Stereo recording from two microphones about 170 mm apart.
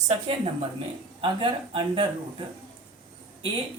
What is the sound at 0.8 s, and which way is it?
Speech, 30° right (ahead or behind).